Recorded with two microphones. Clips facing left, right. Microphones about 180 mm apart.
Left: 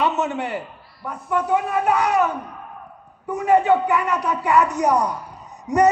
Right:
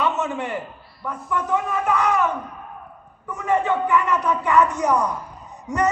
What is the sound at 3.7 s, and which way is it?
A man's voice, 35° left (ahead or behind).